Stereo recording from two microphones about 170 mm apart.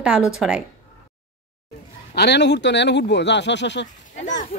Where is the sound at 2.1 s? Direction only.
80° left.